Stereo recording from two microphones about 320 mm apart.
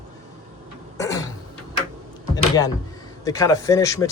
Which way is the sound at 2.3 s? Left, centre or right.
Centre.